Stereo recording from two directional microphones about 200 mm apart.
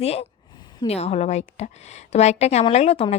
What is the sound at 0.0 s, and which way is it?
A woman's voice, 30° left (ahead or behind).